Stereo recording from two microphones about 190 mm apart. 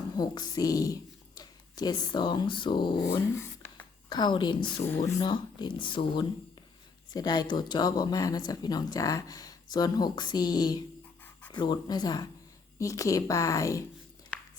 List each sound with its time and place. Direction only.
0.2 s speech: 20° left (ahead or behind)
3.1 s speech: 15° left (ahead or behind)